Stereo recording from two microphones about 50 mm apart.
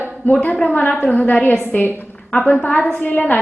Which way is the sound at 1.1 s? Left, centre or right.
Left.